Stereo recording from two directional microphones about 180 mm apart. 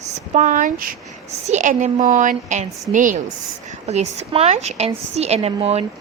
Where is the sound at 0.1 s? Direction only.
40° right (ahead or behind).